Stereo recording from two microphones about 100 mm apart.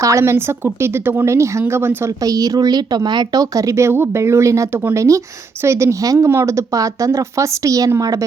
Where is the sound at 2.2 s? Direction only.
35° right (ahead or behind).